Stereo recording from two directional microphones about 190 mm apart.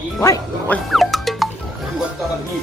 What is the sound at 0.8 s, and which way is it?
Music, centre (ahead or behind).